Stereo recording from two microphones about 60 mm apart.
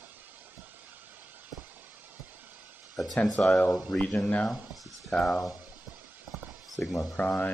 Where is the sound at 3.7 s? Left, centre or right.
Centre.